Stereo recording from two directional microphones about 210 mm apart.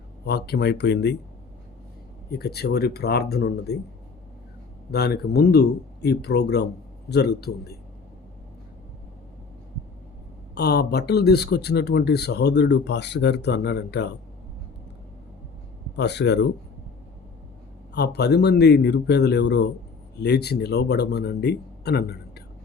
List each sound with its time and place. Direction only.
0.3 s speech: 50° left (ahead or behind)
2.3 s speech: 50° left (ahead or behind)
4.9 s speech: 50° left (ahead or behind)
10.5 s speech: 50° left (ahead or behind)
16.0 s speech: 55° left (ahead or behind)
17.9 s speech: 50° left (ahead or behind)